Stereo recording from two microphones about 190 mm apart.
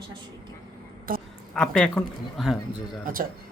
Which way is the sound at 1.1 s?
50° right (ahead or behind).